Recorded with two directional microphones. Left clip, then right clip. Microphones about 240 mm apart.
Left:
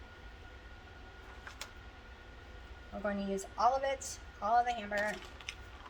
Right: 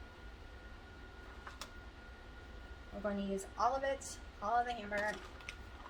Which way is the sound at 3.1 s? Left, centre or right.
Centre.